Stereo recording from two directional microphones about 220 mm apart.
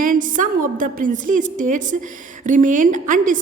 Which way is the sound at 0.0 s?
35° right (ahead or behind).